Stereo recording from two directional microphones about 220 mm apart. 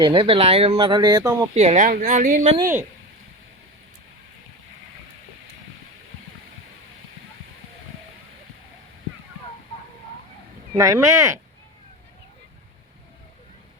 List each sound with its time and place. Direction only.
0.0 s speech: 20° right (ahead or behind)
1.5 s speech: 30° right (ahead or behind)
2.4 s speech: 25° right (ahead or behind)
10.8 s speech: 15° right (ahead or behind)